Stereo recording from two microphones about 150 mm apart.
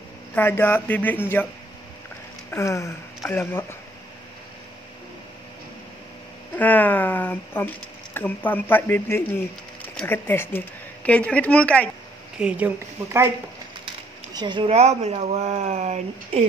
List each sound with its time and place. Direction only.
0.3 s speech: 15° left (ahead or behind)
2.5 s a sound: 20° left (ahead or behind)
3.3 s speech: 15° left (ahead or behind)
6.5 s speech: 10° left (ahead or behind)
12.4 s a woman's voice: 10° right (ahead or behind)
14.3 s speech: 30° right (ahead or behind)
14.7 s speech: 45° right (ahead or behind)